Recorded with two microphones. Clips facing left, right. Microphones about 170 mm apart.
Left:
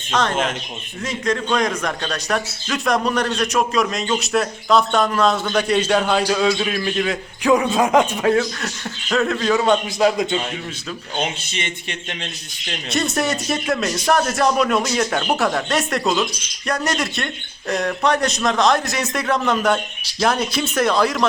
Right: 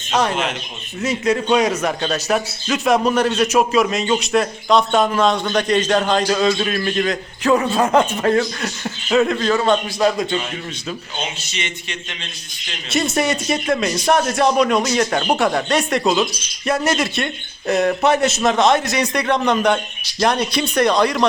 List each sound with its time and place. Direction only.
0.1 s a man's voice: 10° right (ahead or behind)
9.5 s a man's voice: 10° left (ahead or behind)
11.4 s speech: 55° left (ahead or behind)
12.9 s speech: centre (ahead or behind)